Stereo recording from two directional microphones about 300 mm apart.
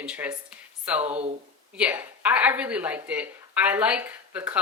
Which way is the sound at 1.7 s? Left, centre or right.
Centre.